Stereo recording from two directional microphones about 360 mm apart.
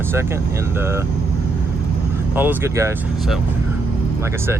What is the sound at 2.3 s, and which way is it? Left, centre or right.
Speech, centre.